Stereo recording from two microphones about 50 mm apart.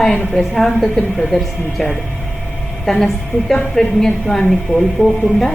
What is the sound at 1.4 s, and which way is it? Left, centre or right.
A woman's voice, centre.